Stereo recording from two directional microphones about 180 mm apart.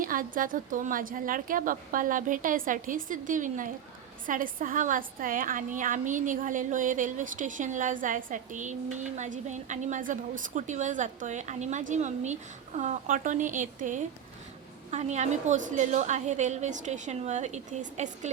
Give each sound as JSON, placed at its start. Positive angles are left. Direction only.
{"t": 0.0, "sound": "a woman's voice", "side_deg": -50}